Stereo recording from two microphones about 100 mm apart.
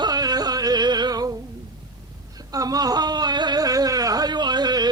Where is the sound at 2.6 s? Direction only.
40° right (ahead or behind).